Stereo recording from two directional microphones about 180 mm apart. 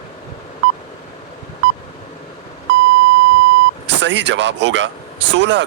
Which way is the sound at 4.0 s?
80° right.